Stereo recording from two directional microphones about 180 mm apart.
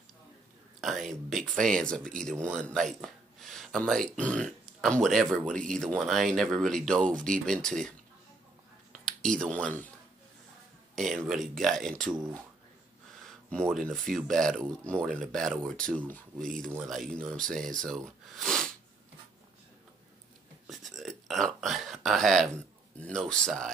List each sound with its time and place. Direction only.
0.7 s speech: centre (ahead or behind)
8.9 s speech: 5° left (ahead or behind)
11.0 s speech: centre (ahead or behind)
13.5 s speech: 5° left (ahead or behind)
18.3 s sneeze: 5° left (ahead or behind)
20.6 s a sound: centre (ahead or behind)
22.9 s speech: 5° left (ahead or behind)